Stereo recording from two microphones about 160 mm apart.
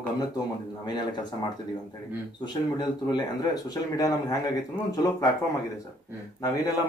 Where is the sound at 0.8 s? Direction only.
25° left (ahead or behind).